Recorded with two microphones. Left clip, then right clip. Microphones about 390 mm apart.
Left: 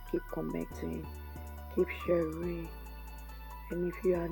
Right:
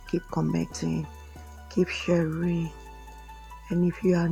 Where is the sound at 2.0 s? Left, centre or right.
Right.